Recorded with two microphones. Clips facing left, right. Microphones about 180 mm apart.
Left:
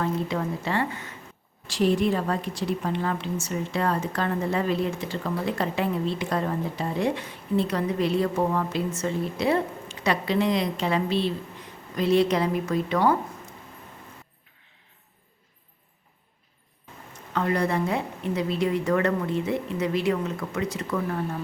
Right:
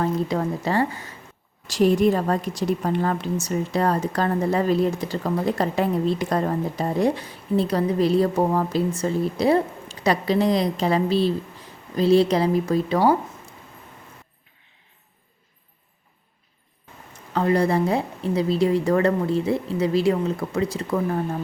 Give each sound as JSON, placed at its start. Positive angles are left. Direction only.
{"t": 0.0, "sound": "a woman's voice", "side_deg": -40}
{"t": 17.3, "sound": "a woman's voice", "side_deg": -30}